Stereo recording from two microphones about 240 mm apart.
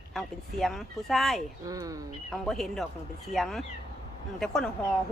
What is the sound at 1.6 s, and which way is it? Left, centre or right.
Speech, centre.